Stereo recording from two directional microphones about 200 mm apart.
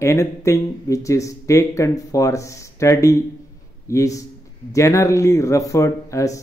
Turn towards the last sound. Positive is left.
turn(degrees=15)  # may be behind; listen again after turning